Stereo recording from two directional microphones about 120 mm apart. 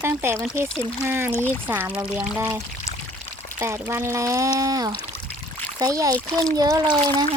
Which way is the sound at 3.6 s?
15° right (ahead or behind).